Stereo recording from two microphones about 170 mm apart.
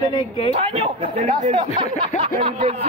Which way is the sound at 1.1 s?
45° right (ahead or behind).